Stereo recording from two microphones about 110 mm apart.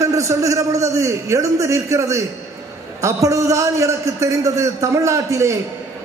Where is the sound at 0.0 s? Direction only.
30° right (ahead or behind).